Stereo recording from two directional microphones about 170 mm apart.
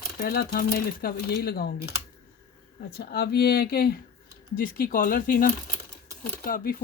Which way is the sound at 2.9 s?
70° left (ahead or behind).